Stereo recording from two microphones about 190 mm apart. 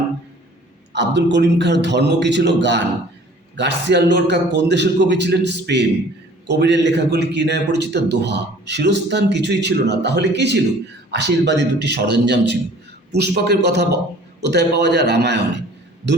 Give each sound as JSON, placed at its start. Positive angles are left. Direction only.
{"t": 0.9, "sound": "a man's voice", "side_deg": -65}